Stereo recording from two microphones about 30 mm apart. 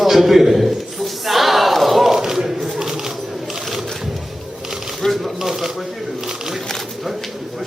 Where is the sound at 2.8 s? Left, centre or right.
Centre.